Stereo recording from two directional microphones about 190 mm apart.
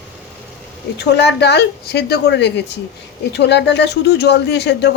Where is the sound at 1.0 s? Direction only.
65° left (ahead or behind).